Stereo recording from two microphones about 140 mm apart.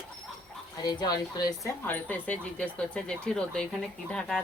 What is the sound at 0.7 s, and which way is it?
Speech, 30° left (ahead or behind).